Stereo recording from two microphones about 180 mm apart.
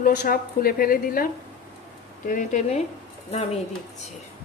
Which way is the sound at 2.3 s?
45° left (ahead or behind).